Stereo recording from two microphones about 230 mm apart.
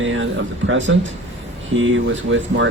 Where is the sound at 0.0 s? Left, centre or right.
Right.